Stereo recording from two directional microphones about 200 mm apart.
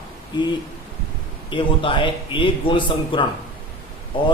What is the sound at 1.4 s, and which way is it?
A man's voice, 25° left (ahead or behind).